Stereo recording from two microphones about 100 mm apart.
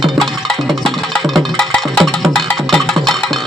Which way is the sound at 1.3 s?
5° left (ahead or behind).